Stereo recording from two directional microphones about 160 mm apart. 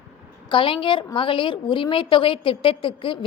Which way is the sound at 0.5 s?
30° left (ahead or behind).